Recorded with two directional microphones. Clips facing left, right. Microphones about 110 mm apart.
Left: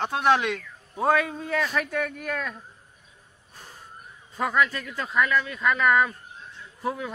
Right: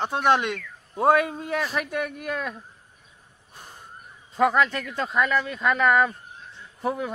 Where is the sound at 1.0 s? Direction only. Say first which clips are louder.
Right 3 dB; 15° right (ahead or behind).